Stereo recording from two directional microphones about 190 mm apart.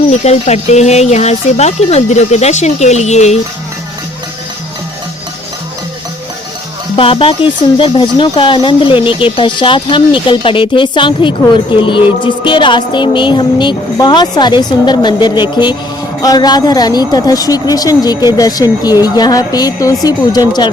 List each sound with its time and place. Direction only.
0.3 s speech: 35° left (ahead or behind)
6.9 s speech: 30° left (ahead or behind)